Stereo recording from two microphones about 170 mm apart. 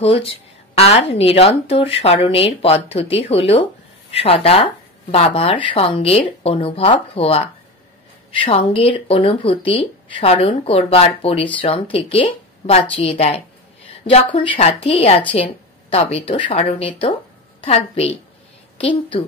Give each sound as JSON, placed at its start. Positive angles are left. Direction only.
{"t": 0.0, "sound": "a woman's voice", "side_deg": 35}